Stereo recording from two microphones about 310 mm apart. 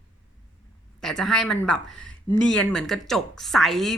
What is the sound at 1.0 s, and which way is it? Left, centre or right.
Speech, centre.